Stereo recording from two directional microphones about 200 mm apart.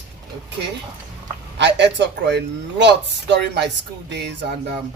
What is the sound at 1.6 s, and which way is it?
Speech, 60° right (ahead or behind).